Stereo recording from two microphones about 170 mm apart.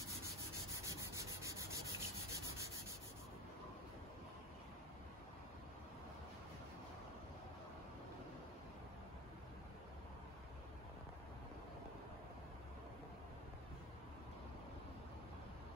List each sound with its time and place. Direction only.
0.8 s rub: 20° right (ahead or behind)